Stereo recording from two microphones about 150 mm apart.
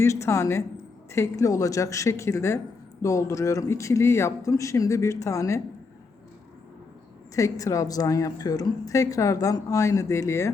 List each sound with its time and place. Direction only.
0.0 s a woman's voice: 20° left (ahead or behind)
7.3 s a woman's voice: 20° left (ahead or behind)